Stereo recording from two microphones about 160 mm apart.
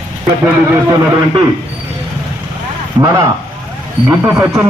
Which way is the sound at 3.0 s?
20° right (ahead or behind).